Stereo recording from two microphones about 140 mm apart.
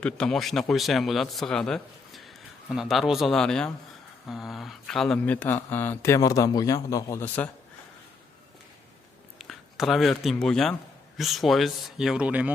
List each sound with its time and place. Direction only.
0.0 s speech: 5° left (ahead or behind)
9.4 s speech: centre (ahead or behind)